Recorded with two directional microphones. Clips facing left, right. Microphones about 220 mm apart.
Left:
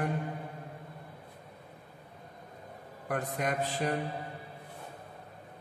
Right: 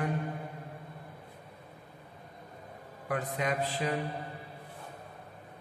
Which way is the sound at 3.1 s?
50° left (ahead or behind).